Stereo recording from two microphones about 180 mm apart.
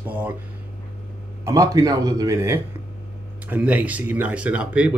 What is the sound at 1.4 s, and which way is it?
Speech, 20° right (ahead or behind).